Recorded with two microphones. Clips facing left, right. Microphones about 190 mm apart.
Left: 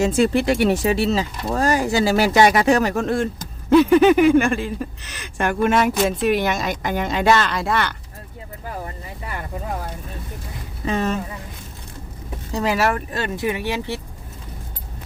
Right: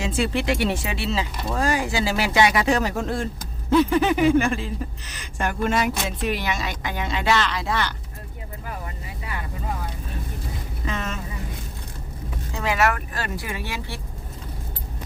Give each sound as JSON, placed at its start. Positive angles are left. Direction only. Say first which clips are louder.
{"t": 0.0, "sound": "speech", "louder": "left 7 dB", "side_deg": 45}
{"t": 2.9, "sound": "speech", "louder": "left 5 dB", "side_deg": 65}
{"t": 10.8, "sound": "speech", "louder": "left 8 dB", "side_deg": 35}
{"t": 12.5, "sound": "speech", "louder": "left 3 dB", "side_deg": 35}